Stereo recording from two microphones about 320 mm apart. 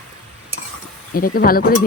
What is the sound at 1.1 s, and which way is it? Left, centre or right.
Speech, left.